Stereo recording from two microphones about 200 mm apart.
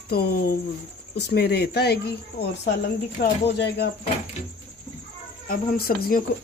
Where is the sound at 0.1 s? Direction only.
50° left (ahead or behind).